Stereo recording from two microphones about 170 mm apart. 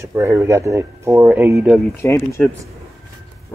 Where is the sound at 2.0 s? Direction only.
15° left (ahead or behind).